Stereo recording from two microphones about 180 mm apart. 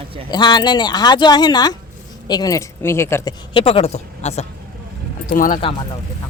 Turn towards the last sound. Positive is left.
turn(degrees=50)  # may be behind; listen again after turning